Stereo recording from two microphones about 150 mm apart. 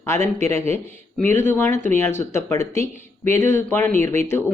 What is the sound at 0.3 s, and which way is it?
Speech, 20° left (ahead or behind).